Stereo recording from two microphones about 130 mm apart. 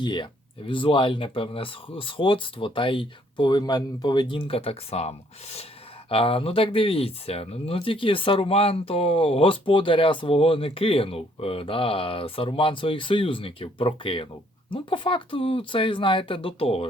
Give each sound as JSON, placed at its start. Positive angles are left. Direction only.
{"t": 0.0, "sound": "speech", "side_deg": 35}